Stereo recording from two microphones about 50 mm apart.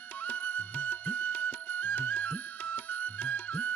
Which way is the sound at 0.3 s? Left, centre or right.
Left.